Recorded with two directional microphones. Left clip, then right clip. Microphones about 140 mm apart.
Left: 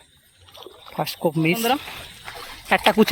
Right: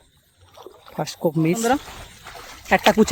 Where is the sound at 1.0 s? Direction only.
30° right (ahead or behind).